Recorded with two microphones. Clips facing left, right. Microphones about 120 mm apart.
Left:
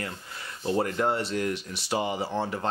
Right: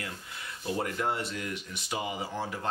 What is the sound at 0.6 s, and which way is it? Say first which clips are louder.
Speech: left 5 dB; 35° left (ahead or behind).